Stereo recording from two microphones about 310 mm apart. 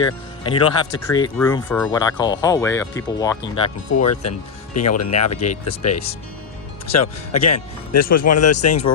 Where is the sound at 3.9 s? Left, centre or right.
Left.